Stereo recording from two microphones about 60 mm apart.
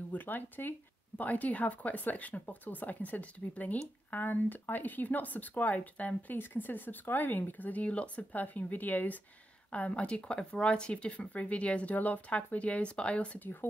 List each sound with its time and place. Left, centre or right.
0.1 s speech: left